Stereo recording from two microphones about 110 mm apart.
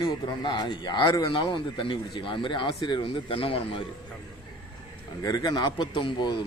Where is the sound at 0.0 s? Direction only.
45° left (ahead or behind).